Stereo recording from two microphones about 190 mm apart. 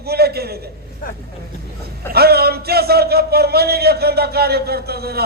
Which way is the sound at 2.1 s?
55° right (ahead or behind).